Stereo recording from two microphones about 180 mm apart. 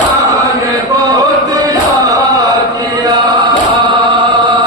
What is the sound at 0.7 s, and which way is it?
Music, 20° right (ahead or behind).